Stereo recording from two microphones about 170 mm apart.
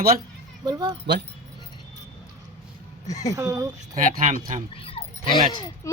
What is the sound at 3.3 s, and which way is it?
Speech, 20° right (ahead or behind).